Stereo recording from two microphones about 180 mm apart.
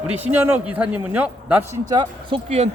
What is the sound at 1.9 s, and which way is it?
Speech, 25° right (ahead or behind).